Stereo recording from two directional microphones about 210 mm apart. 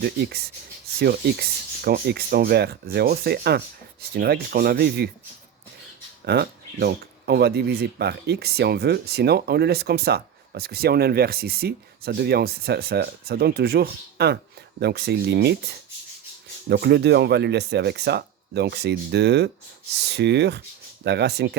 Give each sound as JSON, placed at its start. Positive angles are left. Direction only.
{"t": 0.0, "sound": "speech", "side_deg": -50}
{"t": 6.2, "sound": "speech", "side_deg": -50}
{"t": 16.6, "sound": "speech", "side_deg": -55}